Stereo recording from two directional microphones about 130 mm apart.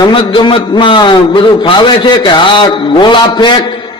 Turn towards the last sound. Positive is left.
turn(degrees=35)  # may be behind; listen again after turning